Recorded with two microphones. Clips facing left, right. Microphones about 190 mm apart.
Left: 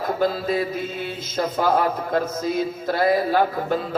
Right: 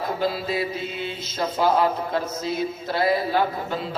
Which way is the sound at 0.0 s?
45° left (ahead or behind).